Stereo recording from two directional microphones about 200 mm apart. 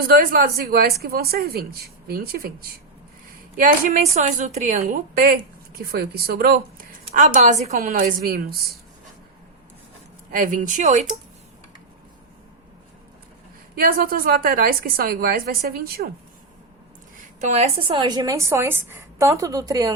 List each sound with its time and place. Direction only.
0.0 s a woman's voice: 50° right (ahead or behind)
10.3 s a woman's voice: 40° right (ahead or behind)
13.7 s a woman's voice: 45° right (ahead or behind)
17.4 s a woman's voice: 30° right (ahead or behind)